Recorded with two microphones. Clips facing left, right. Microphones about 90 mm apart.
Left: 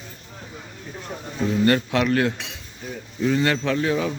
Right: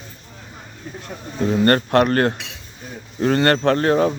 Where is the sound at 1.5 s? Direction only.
50° right (ahead or behind).